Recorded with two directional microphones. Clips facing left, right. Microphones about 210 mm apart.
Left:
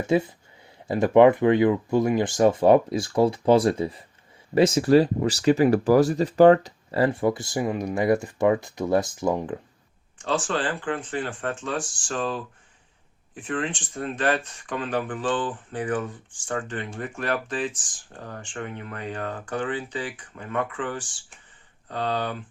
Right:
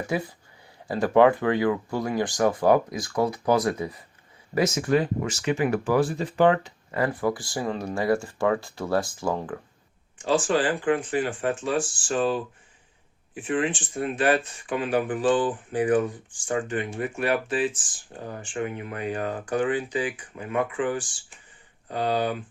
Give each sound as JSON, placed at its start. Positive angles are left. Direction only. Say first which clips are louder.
{"t": 0.0, "sound": "speech", "louder": "left 6 dB", "side_deg": 25}
{"t": 10.2, "sound": "speech", "louder": "right 3 dB", "side_deg": -10}